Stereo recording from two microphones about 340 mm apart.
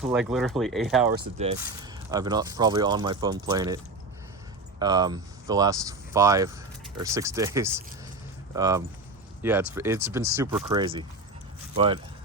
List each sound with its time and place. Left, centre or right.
0.0 s speech: centre
4.8 s speech: centre